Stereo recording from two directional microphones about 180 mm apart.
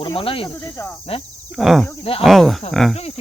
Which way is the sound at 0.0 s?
30° left (ahead or behind).